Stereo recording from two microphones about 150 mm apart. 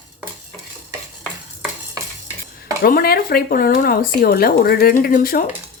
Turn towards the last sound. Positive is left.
turn(degrees=75)  # may be behind; listen again after turning